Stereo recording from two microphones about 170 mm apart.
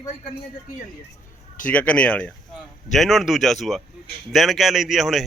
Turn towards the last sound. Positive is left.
turn(degrees=0)  # may be behind; listen again after turning